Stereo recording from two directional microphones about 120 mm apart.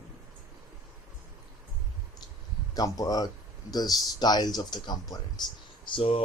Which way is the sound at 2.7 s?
30° left (ahead or behind).